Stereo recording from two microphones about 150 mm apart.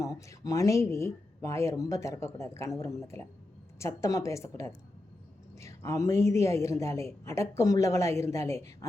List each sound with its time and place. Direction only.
0.0 s a man's voice: 20° left (ahead or behind)